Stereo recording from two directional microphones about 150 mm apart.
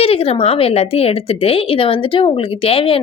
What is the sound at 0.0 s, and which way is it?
Speech, 40° left (ahead or behind).